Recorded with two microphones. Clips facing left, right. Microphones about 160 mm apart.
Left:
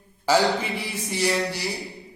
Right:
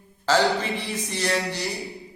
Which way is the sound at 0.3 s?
10° left (ahead or behind).